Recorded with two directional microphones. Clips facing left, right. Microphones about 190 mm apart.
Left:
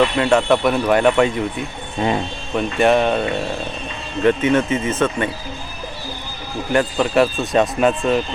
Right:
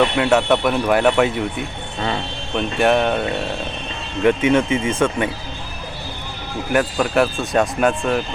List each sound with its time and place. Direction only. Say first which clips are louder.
0.2 s speech: left 1 dB; 5° right (ahead or behind)
2.0 s speech: left 4 dB; 20° left (ahead or behind)
2.6 s speech: left 1 dB; centre (ahead or behind)
6.7 s speech: left 1 dB; centre (ahead or behind)